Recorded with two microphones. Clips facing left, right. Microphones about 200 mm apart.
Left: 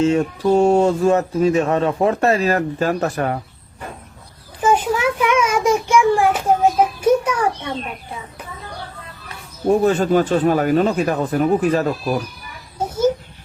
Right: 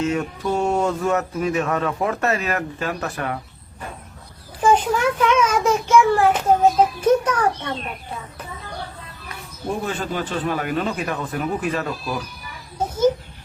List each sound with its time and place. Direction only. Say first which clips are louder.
0.0 s speech: left 6 dB; 30° left (ahead or behind)
4.6 s a sound: left 1 dB; 5° left (ahead or behind)
9.6 s speech: left 10 dB; 45° left (ahead or behind)